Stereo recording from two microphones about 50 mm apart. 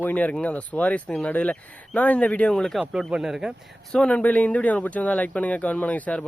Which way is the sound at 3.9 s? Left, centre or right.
Centre.